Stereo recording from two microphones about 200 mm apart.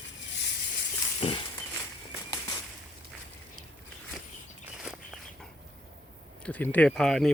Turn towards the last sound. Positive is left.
turn(degrees=0)  # may be behind; listen again after turning